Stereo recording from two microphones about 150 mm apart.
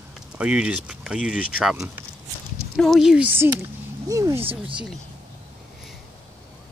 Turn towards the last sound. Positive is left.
turn(degrees=-35)  # may be behind; listen again after turning